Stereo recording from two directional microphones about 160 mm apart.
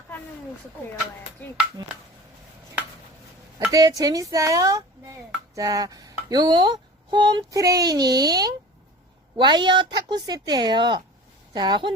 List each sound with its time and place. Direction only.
1.8 s speech: 30° right (ahead or behind)
3.7 s speech: 20° right (ahead or behind)